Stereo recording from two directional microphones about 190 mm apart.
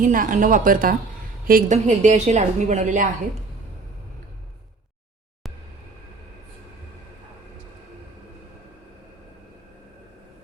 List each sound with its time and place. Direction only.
0.0 s a woman's voice: 45° right (ahead or behind)